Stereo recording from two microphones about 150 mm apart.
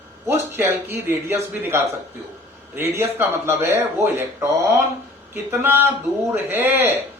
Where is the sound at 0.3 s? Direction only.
15° right (ahead or behind).